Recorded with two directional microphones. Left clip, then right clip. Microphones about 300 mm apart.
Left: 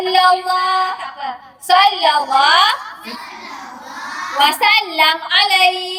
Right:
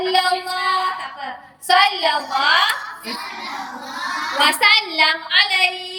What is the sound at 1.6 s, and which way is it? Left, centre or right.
Speech, centre.